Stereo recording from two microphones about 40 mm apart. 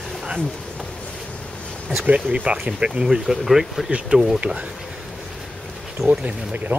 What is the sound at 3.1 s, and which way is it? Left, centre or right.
Speech, centre.